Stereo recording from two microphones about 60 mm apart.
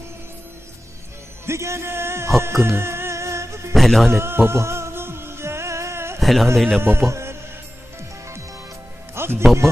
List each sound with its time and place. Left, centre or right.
1.5 s music: right
3.8 s speech: centre
4.1 s music: right
6.1 s a man's voice: centre
6.7 s a man's voice: right
9.1 s music: right